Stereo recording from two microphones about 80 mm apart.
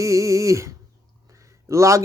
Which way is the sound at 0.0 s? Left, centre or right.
Right.